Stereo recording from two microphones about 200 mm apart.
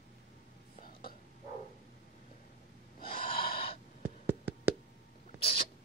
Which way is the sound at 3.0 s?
25° left (ahead or behind).